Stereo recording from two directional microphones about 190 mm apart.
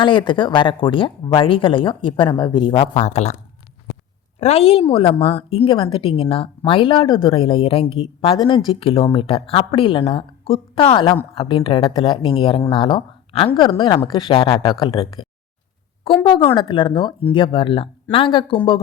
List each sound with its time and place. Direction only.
0.0 s speech: 25° left (ahead or behind)
4.4 s speech: 35° left (ahead or behind)